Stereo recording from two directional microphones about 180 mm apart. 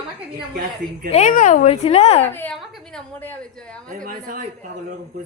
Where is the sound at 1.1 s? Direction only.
40° left (ahead or behind).